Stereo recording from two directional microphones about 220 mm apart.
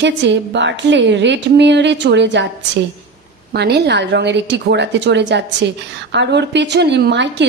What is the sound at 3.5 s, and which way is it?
A woman's voice, 50° right (ahead or behind).